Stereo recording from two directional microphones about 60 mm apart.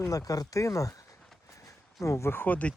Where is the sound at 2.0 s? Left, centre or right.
Left.